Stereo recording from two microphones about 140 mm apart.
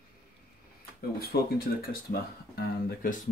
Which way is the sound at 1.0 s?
90° left.